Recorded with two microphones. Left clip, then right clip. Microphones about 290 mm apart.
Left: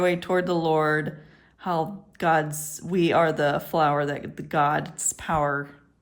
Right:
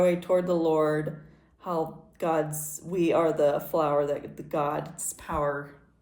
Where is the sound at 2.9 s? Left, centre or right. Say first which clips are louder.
Left 3 dB; left.